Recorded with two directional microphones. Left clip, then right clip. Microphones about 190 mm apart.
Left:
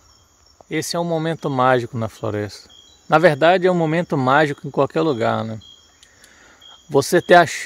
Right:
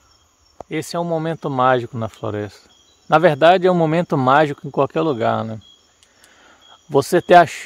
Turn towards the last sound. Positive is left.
turn(degrees=-5)  # may be behind; listen again after turning